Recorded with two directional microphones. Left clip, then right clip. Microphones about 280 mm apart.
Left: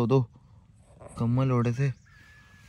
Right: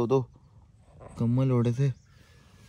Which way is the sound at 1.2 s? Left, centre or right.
Centre.